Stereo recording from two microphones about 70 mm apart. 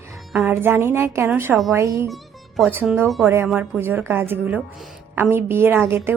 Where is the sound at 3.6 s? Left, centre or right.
Right.